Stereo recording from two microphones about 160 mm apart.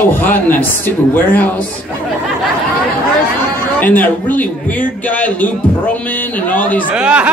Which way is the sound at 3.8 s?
10° left (ahead or behind).